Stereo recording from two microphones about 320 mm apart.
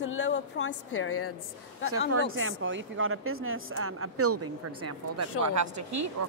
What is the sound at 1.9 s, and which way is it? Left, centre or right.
A woman's voice, right.